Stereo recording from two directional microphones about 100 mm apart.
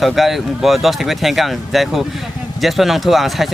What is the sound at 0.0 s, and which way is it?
Speech, centre (ahead or behind).